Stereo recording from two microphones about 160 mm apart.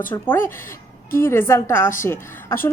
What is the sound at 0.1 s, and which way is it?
Speech, 15° left (ahead or behind).